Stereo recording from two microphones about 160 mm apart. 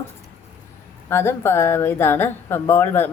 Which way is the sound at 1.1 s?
15° left (ahead or behind).